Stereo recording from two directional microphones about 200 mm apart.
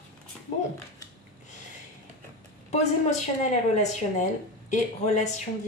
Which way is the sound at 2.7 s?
35° left (ahead or behind).